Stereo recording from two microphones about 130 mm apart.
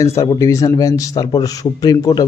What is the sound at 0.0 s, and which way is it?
A man's voice, 25° left (ahead or behind).